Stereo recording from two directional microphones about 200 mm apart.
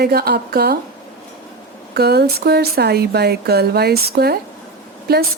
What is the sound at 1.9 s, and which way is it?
A woman's voice, 55° right (ahead or behind).